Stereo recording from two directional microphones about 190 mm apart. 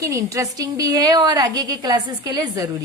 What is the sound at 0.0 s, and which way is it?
A woman's voice, 15° right (ahead or behind).